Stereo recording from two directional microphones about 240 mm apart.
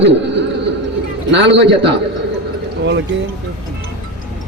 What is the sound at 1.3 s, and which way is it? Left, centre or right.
Speech, right.